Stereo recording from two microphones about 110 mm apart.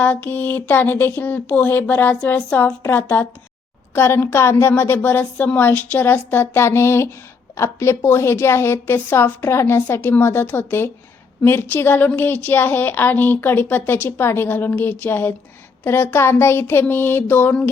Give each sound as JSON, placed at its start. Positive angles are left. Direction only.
{"t": 0.0, "sound": "a woman's voice", "side_deg": 15}